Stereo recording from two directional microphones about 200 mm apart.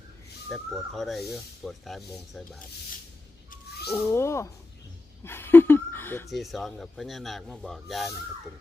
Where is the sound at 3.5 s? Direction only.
55° left (ahead or behind).